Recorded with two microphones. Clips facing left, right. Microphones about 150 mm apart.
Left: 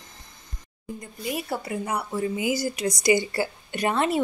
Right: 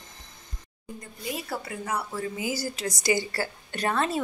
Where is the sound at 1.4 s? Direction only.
25° left (ahead or behind).